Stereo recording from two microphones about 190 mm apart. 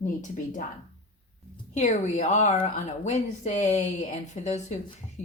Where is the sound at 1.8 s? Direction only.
40° left (ahead or behind).